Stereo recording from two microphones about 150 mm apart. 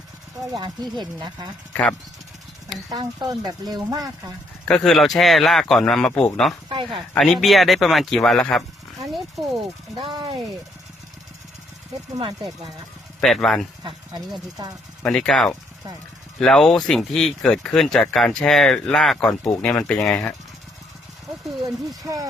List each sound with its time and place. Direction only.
0.5 s speech: 30° right (ahead or behind)
1.7 s speech: 5° left (ahead or behind)
2.9 s speech: 25° right (ahead or behind)
4.6 s speech: 5° left (ahead or behind)
6.7 s speech: 35° right (ahead or behind)
7.2 s speech: centre (ahead or behind)
9.4 s speech: 25° right (ahead or behind)
12.1 s speech: 30° right (ahead or behind)
13.2 s speech: centre (ahead or behind)
14.5 s speech: 25° right (ahead or behind)
15.0 s speech: 5° left (ahead or behind)
22.0 s speech: 25° right (ahead or behind)